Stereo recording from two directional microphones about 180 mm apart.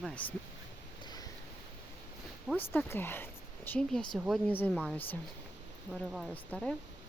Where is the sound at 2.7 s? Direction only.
10° left (ahead or behind).